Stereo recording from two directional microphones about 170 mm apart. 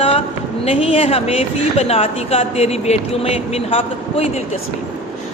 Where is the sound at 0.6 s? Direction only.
35° left (ahead or behind).